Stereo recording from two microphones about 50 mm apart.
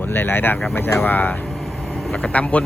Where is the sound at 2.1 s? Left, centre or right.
Left.